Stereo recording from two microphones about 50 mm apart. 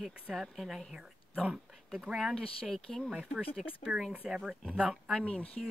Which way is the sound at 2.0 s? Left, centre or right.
Centre.